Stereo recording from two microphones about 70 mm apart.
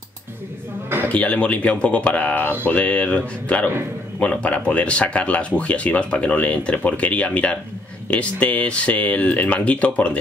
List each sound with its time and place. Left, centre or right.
1.0 s speech: centre